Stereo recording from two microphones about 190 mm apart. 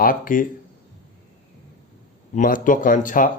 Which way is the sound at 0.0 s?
45° left (ahead or behind).